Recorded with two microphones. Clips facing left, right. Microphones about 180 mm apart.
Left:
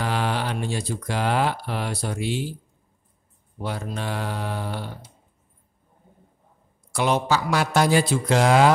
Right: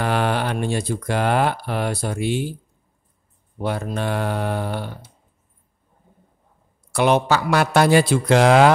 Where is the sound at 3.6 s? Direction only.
55° right (ahead or behind).